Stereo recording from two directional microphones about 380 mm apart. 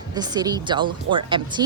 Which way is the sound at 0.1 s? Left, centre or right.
Centre.